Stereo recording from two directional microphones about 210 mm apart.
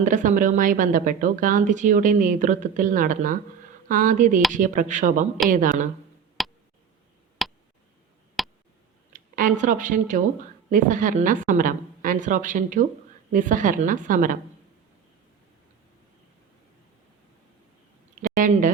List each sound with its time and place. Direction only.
0.0 s speech: 35° right (ahead or behind)
6.4 s tick: centre (ahead or behind)
7.4 s a sound: centre (ahead or behind)
8.4 s tick: centre (ahead or behind)
9.1 s speech: 40° right (ahead or behind)
18.2 s speech: 40° right (ahead or behind)